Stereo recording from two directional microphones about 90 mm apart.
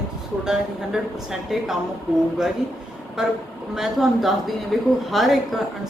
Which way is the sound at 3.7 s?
5° right (ahead or behind).